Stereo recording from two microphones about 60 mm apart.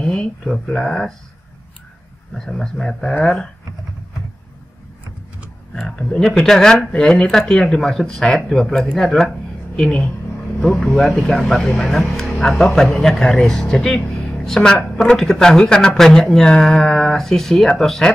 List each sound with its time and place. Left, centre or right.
0.0 s speech: centre
2.3 s speech: centre
6.3 s speech: centre
9.8 s a woman's voice: left
10.6 s speech: centre